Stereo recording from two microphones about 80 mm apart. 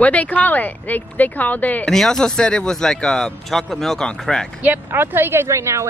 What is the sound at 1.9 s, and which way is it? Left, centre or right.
Speech, centre.